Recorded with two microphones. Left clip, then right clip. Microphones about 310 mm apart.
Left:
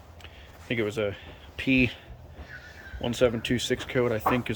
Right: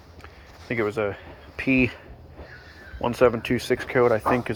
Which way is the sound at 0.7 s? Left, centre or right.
Centre.